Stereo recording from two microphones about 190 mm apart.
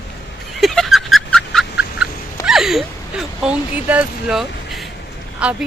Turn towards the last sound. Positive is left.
turn(degrees=-5)  # may be behind; listen again after turning